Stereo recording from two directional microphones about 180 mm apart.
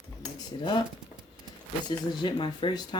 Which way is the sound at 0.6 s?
25° left (ahead or behind).